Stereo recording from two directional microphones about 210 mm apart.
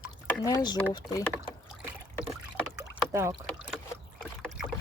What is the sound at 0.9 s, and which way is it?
Speech, 15° left (ahead or behind).